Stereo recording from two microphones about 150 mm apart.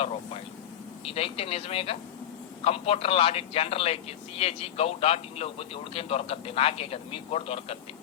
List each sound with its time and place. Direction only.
1.0 s speech: 40° left (ahead or behind)